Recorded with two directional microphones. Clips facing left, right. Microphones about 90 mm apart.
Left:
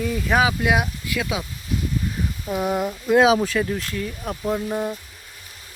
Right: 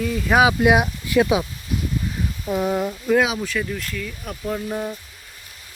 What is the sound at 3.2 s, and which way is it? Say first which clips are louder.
Speech: left 4 dB; 35° left (ahead or behind).